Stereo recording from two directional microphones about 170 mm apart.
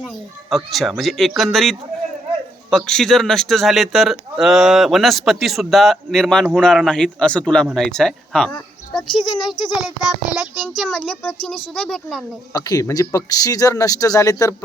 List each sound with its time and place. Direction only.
0.5 s speech: centre (ahead or behind)
9.1 s speech: 25° left (ahead or behind)
10.1 s speech: centre (ahead or behind)
12.5 s speech: 20° left (ahead or behind)